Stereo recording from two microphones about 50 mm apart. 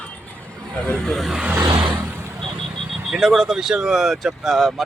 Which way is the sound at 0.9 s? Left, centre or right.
Centre.